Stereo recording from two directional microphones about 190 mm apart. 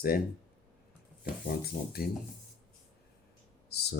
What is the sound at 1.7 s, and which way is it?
Speech, 55° left (ahead or behind).